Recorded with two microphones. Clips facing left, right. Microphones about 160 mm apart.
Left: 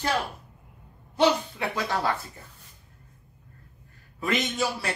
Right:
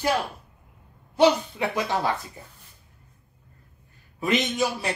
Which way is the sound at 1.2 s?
20° right (ahead or behind).